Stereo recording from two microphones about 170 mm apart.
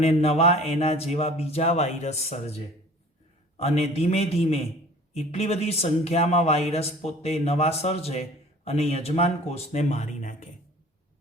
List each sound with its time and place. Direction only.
0.0 s a man's voice: 35° left (ahead or behind)
3.6 s a man's voice: 40° left (ahead or behind)